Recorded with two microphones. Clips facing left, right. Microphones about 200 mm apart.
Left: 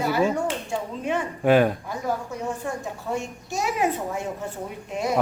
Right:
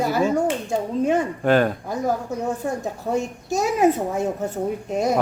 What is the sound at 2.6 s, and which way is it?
A woman's voice, 35° right (ahead or behind).